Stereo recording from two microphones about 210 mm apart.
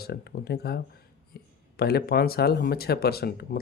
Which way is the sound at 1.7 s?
50° left (ahead or behind).